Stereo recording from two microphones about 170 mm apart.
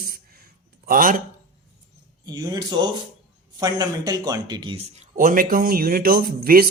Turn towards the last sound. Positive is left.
turn(degrees=-60)  # may be behind; listen again after turning